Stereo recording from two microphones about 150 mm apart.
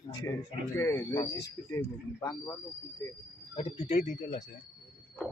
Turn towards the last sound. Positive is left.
turn(degrees=50)  # may be behind; listen again after turning